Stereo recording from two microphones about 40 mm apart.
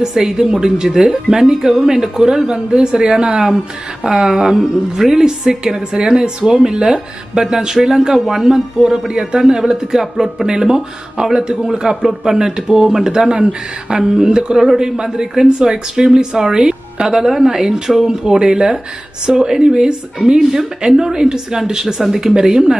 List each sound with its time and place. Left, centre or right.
0.0 s a woman's voice: centre